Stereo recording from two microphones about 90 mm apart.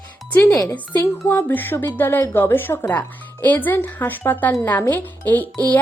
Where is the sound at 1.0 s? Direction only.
25° left (ahead or behind).